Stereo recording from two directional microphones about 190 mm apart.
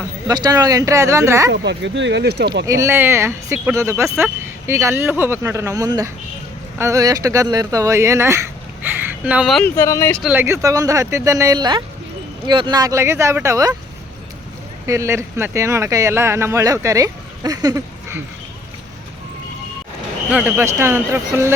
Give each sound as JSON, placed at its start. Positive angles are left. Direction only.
{"t": 0.3, "sound": "speech", "side_deg": -20}
{"t": 1.5, "sound": "speech", "side_deg": -70}
{"t": 2.6, "sound": "speech", "side_deg": -15}
{"t": 8.8, "sound": "a sound", "side_deg": -10}
{"t": 9.7, "sound": "speech", "side_deg": 15}
{"t": 10.2, "sound": "speech", "side_deg": -10}
{"t": 14.8, "sound": "speech", "side_deg": -15}
{"t": 20.3, "sound": "speech", "side_deg": -10}